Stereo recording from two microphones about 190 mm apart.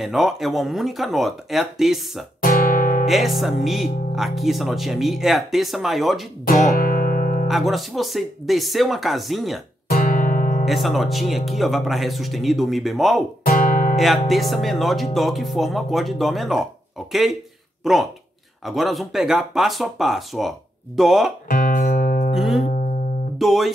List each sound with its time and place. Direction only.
0.0 s speech: centre (ahead or behind)
2.4 s guitar: 50° left (ahead or behind)
3.1 s speech: centre (ahead or behind)
6.7 s music: 50° left (ahead or behind)
7.4 s speech: centre (ahead or behind)
9.8 s guitar: 50° left (ahead or behind)
10.6 s speech: centre (ahead or behind)
13.5 s music: 45° left (ahead or behind)
13.9 s speech: centre (ahead or behind)
18.7 s speech: centre (ahead or behind)
21.5 s music: 50° left (ahead or behind)
22.3 s music: centre (ahead or behind)
22.6 s music: 40° left (ahead or behind)
23.3 s speech: centre (ahead or behind)